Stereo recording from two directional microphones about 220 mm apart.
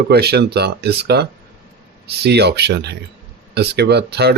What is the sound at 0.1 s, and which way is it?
Speech, 45° right (ahead or behind).